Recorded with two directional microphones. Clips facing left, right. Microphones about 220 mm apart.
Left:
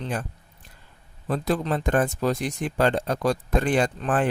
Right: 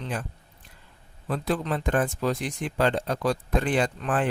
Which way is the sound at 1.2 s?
40° left (ahead or behind).